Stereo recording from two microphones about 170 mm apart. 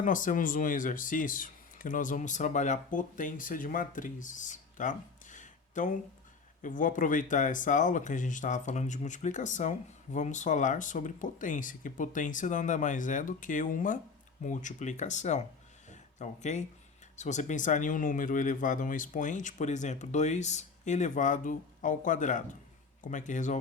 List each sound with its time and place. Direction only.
0.0 s speech: 50° left (ahead or behind)
15.9 s a sound: 45° left (ahead or behind)
17.2 s speech: 45° left (ahead or behind)